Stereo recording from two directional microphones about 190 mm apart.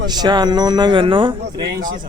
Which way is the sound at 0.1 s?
20° right (ahead or behind).